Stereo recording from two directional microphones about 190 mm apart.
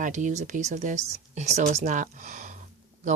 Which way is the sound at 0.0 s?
40° right (ahead or behind).